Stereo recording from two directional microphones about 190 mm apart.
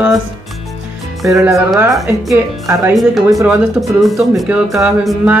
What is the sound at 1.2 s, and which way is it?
Speech, 15° right (ahead or behind).